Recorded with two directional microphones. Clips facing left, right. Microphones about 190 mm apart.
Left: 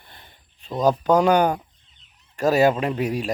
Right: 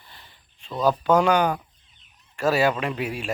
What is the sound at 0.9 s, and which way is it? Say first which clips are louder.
Speech: left 2 dB; 40° left (ahead or behind).